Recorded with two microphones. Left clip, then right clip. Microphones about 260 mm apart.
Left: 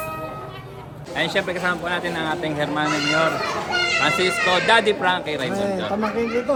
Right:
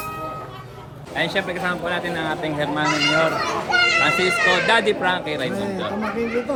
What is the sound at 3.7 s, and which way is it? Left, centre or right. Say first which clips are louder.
Children playing: right 6 dB; right.